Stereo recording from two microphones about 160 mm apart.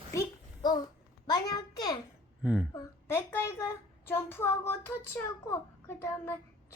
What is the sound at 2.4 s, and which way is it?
Speech, 5° right (ahead or behind).